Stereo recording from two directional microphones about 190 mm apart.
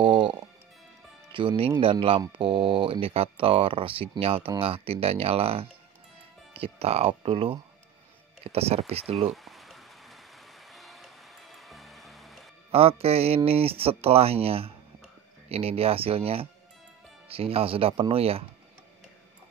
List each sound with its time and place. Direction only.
1.3 s speech: 25° right (ahead or behind)
9.3 s a sound: centre (ahead or behind)
10.7 s music: centre (ahead or behind)
12.7 s speech: 30° right (ahead or behind)